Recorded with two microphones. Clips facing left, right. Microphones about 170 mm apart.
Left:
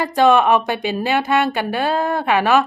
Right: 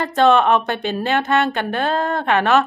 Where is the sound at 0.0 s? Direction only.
10° left (ahead or behind).